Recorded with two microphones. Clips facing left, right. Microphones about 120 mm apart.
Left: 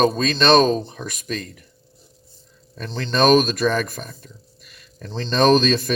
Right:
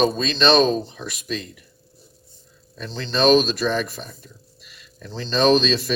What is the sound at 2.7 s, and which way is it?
Speech, 50° left (ahead or behind).